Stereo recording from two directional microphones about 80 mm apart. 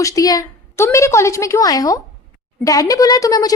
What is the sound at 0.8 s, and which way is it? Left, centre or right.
A woman's voice, left.